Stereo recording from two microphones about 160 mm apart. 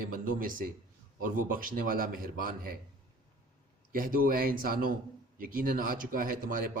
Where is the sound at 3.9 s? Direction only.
65° right (ahead or behind).